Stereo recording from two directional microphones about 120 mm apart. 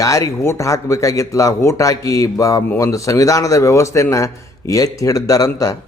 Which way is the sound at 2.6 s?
15° left (ahead or behind).